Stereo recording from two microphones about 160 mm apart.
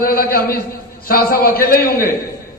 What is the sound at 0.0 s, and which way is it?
A man's voice, 70° left (ahead or behind).